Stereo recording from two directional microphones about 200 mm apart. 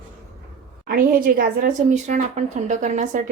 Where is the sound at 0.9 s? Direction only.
45° right (ahead or behind).